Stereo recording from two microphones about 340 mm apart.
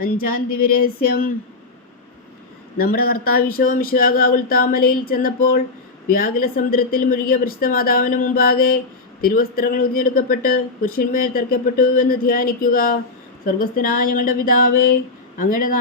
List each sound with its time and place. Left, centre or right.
0.0 s speech: left
2.7 s speech: left